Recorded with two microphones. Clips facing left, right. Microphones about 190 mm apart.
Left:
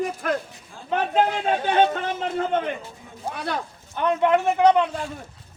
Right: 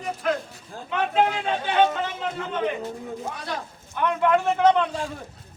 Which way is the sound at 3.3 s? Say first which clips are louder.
Left 4 dB; 60° left (ahead or behind).